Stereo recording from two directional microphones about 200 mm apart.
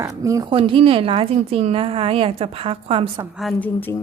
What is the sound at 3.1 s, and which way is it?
Speech, centre (ahead or behind).